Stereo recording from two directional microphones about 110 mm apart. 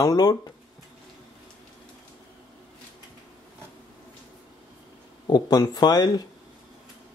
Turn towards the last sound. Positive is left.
turn(degrees=40)  # may be behind; listen again after turning